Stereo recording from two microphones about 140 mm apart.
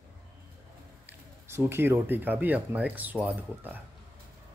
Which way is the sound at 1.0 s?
15° right (ahead or behind).